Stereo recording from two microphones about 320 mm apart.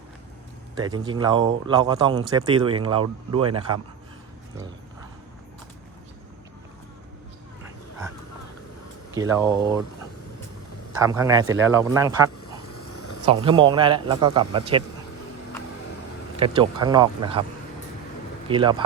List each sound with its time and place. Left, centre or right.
0.8 s speech: centre
9.1 s speech: centre
10.9 s speech: centre
12.6 s a sound: left
13.2 s speech: centre
16.4 s speech: centre
18.4 s speech: centre